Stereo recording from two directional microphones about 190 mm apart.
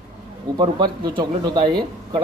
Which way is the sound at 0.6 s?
25° right (ahead or behind).